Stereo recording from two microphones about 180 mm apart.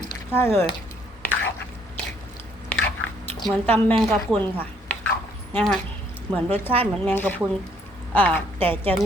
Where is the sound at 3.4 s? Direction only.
10° left (ahead or behind).